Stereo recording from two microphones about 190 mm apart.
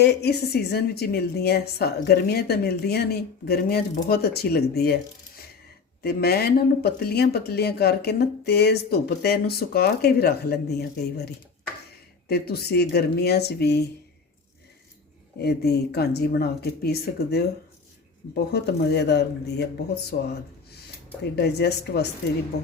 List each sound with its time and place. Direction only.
0.0 s a woman's voice: 60° left (ahead or behind)
6.0 s a woman's voice: 55° left (ahead or behind)
12.3 s a woman's voice: 55° left (ahead or behind)
15.4 s a woman's voice: 60° left (ahead or behind)
18.5 s a woman's voice: 60° left (ahead or behind)
21.3 s a woman's voice: 60° left (ahead or behind)